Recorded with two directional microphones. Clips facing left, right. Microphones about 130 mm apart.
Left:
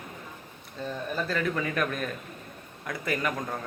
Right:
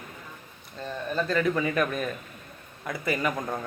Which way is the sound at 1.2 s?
Centre (ahead or behind).